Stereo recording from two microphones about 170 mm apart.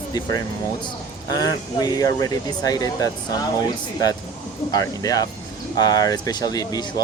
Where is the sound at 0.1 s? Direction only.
20° left (ahead or behind).